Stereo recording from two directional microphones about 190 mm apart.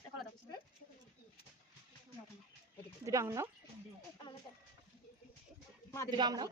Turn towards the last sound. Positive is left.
turn(degrees=-20)  # may be behind; listen again after turning